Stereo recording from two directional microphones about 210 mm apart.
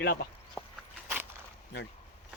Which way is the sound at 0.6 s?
Centre (ahead or behind).